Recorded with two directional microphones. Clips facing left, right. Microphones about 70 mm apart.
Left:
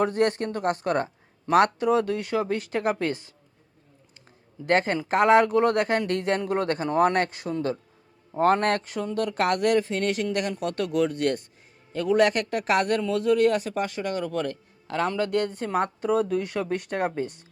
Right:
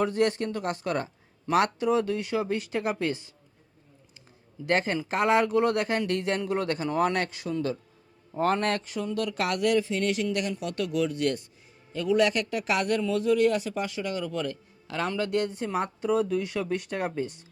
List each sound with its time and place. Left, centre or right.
0.0 s a man's voice: left
4.6 s a man's voice: left